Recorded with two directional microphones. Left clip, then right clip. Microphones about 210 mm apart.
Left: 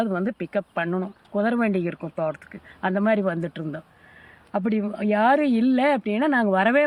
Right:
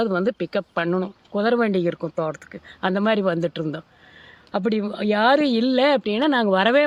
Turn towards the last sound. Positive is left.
turn(degrees=-40)  # may be behind; listen again after turning